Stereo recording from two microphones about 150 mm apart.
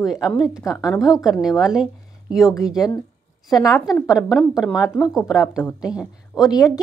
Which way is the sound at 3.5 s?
25° left (ahead or behind).